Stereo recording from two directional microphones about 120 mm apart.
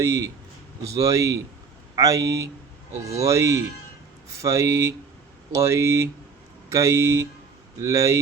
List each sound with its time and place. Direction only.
0.0 s speech: 25° right (ahead or behind)